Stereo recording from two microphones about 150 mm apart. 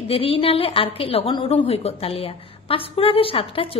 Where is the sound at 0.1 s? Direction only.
35° left (ahead or behind).